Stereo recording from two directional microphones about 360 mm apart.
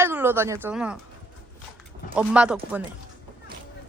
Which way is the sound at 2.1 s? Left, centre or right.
Centre.